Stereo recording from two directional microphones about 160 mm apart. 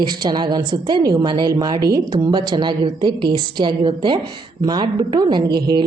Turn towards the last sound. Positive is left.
turn(degrees=-25)  # may be behind; listen again after turning